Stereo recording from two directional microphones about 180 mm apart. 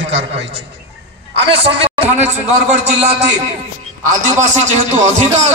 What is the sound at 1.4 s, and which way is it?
A man's voice, 30° right (ahead or behind).